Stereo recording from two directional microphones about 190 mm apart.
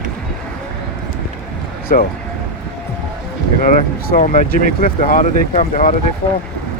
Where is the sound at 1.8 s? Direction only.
50° left (ahead or behind).